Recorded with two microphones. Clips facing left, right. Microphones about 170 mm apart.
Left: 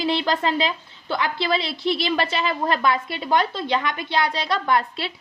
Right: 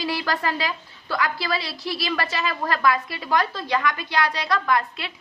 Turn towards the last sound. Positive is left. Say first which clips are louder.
# left 2 dB
turn(degrees=30)  # may be behind; listen again after turning